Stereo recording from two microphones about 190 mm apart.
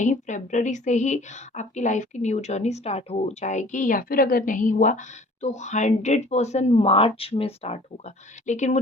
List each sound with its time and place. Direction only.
0.0 s a woman's voice: 40° left (ahead or behind)